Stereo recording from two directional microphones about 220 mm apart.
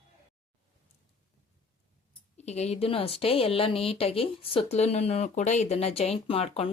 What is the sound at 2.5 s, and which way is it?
A woman's voice, 30° left (ahead or behind).